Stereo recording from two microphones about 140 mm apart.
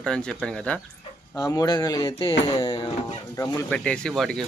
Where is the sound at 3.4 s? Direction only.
10° left (ahead or behind).